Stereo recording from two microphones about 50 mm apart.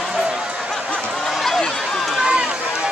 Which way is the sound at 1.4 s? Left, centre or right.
Centre.